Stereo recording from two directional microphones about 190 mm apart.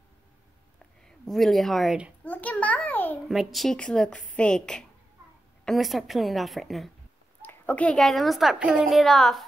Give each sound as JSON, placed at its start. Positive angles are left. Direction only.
{"t": 1.0, "sound": "a woman's voice", "side_deg": 0}
{"t": 2.2, "sound": "a child's voice", "side_deg": 10}
{"t": 3.3, "sound": "a woman's voice", "side_deg": 0}